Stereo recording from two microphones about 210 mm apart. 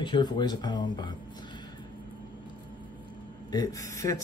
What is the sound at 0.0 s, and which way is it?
Speech, 20° left (ahead or behind).